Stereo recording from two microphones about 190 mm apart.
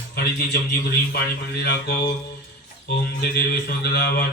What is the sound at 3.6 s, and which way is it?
Speech, 55° left (ahead or behind).